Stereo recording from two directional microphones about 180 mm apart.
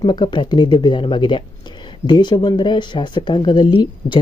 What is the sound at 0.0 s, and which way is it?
Speech, 25° left (ahead or behind).